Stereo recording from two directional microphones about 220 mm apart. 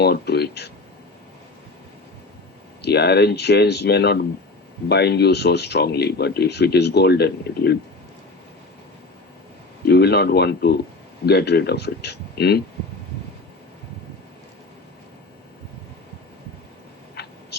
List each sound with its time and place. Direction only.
0.0 s speech: 45° left (ahead or behind)
2.8 s speech: 50° left (ahead or behind)
9.8 s speech: 45° left (ahead or behind)
17.2 s a sound: 45° left (ahead or behind)